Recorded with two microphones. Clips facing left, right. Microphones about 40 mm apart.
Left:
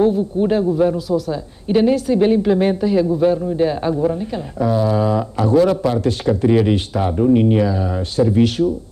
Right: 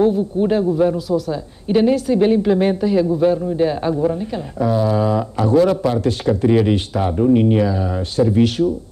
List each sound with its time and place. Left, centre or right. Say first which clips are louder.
0.0 s a man's voice: even; right